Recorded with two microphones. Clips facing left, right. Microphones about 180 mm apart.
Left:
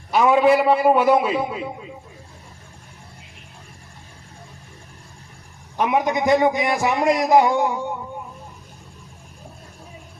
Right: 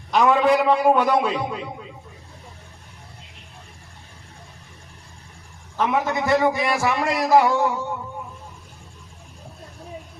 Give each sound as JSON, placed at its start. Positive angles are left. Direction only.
{"t": 0.1, "sound": "a man's voice", "side_deg": 5}
{"t": 5.7, "sound": "a man's voice", "side_deg": 15}